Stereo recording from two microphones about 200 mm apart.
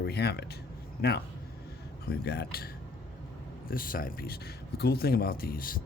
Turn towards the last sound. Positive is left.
turn(degrees=45)  # may be behind; listen again after turning